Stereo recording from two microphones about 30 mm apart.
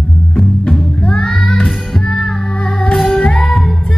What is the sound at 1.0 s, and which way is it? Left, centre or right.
Music, centre.